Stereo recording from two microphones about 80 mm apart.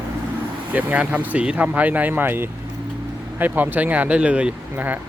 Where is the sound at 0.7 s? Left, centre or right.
Right.